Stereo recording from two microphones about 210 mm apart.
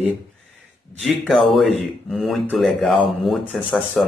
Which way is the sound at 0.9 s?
Centre (ahead or behind).